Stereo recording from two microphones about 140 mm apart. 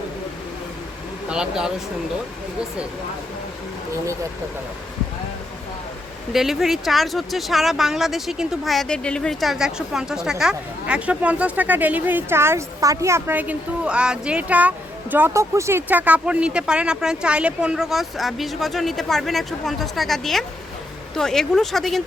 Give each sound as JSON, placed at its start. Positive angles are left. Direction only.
{"t": 1.3, "sound": "speech", "side_deg": -5}
{"t": 4.0, "sound": "speech", "side_deg": -20}
{"t": 6.3, "sound": "speech", "side_deg": 0}